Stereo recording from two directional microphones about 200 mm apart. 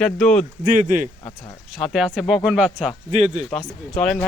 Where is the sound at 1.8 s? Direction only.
Centre (ahead or behind).